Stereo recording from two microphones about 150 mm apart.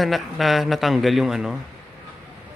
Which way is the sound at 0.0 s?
Centre (ahead or behind).